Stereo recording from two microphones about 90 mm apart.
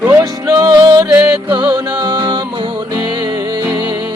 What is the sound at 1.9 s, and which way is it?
Music, 55° right (ahead or behind).